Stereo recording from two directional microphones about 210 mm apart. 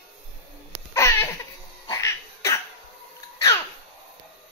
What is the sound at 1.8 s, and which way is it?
Cat, 15° left (ahead or behind).